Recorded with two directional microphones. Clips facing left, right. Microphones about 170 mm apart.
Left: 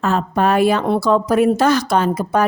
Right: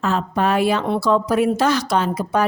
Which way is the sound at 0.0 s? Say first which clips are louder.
Left 3 dB; 50° left (ahead or behind).